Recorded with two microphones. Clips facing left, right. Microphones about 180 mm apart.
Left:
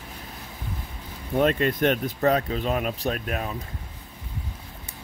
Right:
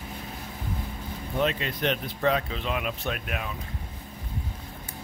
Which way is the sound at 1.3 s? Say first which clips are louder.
Left 6 dB; 50° left (ahead or behind).